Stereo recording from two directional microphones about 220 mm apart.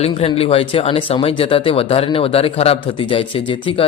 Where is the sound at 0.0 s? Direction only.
25° left (ahead or behind).